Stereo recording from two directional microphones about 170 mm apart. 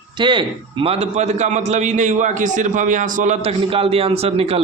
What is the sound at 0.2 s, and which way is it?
A man's voice, 30° right (ahead or behind).